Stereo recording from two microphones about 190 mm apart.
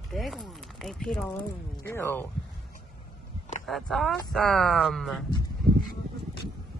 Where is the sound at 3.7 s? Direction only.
Centre (ahead or behind).